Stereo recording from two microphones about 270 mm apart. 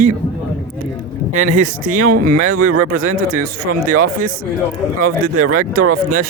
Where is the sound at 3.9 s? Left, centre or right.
Right.